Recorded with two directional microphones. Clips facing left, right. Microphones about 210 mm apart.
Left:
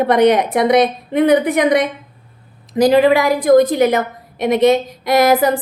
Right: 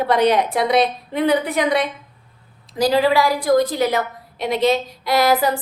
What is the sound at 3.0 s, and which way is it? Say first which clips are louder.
A woman's voice: left 4 dB; 20° left (ahead or behind).